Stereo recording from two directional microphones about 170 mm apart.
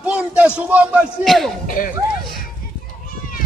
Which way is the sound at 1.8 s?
50° left (ahead or behind).